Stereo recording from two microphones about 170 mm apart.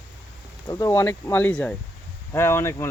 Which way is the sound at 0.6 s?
20° left (ahead or behind).